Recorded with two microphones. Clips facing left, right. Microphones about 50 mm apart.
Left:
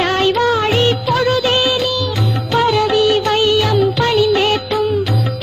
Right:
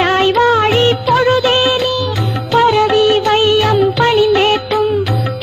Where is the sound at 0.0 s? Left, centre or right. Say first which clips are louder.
Right 3 dB; right.